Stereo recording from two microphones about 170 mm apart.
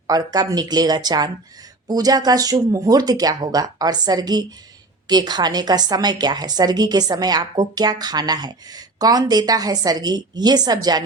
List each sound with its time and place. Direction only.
0.1 s a woman's voice: 25° right (ahead or behind)